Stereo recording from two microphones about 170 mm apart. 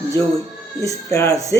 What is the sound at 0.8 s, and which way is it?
Speech, 20° left (ahead or behind).